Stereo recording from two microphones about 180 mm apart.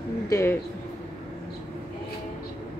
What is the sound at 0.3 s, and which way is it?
Speech, 15° left (ahead or behind).